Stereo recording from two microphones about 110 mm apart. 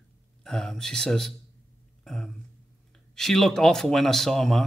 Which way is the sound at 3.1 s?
5° left (ahead or behind).